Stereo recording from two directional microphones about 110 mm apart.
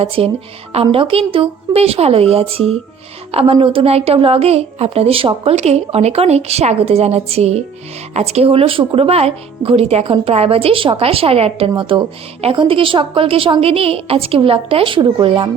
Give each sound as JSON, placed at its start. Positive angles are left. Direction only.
{"t": 0.0, "sound": "a woman's voice", "side_deg": -60}
{"t": 11.8, "sound": "speech", "side_deg": -50}